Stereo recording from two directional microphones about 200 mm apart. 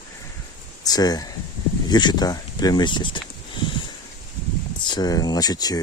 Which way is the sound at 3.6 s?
20° left (ahead or behind).